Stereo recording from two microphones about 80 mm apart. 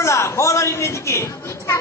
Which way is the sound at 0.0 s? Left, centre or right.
Left.